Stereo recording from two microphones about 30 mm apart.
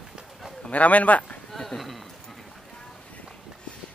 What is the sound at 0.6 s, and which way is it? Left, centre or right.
Speech, left.